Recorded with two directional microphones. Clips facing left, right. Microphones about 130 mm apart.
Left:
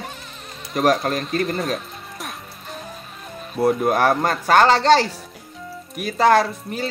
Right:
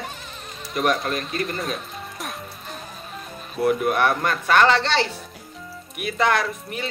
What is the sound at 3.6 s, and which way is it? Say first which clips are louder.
Speech: left 2 dB; 35° left (ahead or behind).